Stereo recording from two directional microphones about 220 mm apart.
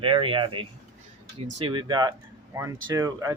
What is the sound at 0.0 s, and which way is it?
Speech, 25° right (ahead or behind).